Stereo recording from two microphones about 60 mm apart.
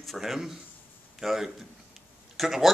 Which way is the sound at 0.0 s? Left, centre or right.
Centre.